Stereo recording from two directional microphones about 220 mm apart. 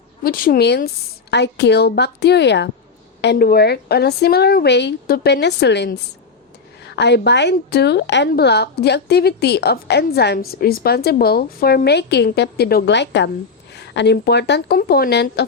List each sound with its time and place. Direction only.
0.2 s a woman's voice: 40° left (ahead or behind)